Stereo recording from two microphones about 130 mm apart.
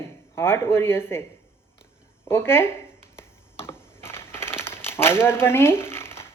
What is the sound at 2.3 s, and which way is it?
Speech, 20° left (ahead or behind).